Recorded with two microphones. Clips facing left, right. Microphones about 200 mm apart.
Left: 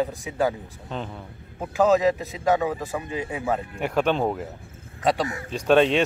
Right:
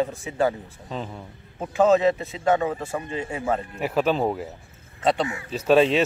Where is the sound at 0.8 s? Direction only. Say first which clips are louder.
Even; centre (ahead or behind).